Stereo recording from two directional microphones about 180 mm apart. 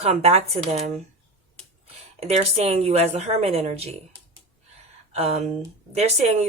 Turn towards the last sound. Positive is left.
turn(degrees=-35)  # may be behind; listen again after turning